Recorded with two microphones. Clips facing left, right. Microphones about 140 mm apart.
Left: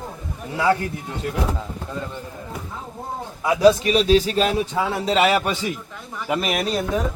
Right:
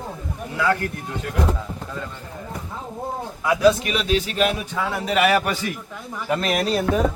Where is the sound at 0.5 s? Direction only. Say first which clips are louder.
Left 2 dB; 25° left (ahead or behind).